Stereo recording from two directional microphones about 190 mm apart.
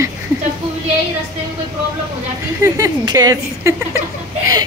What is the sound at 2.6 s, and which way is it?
Speech, 15° right (ahead or behind).